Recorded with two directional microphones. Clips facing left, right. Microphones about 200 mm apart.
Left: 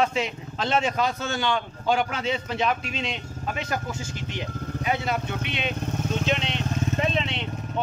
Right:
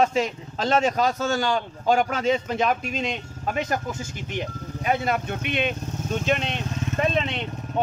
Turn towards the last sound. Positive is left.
turn(degrees=-50)  # may be behind; listen again after turning